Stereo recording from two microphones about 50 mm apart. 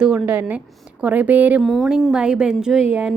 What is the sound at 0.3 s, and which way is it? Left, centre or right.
Speech, right.